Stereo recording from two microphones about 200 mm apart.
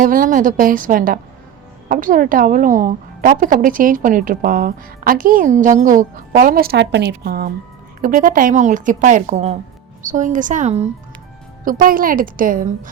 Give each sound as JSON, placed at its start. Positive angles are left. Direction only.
{"t": 0.0, "sound": "a woman's voice", "side_deg": -45}
{"t": 11.6, "sound": "a woman's voice", "side_deg": -45}